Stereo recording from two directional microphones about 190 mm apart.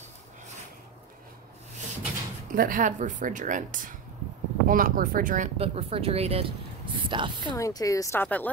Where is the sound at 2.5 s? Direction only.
45° right (ahead or behind).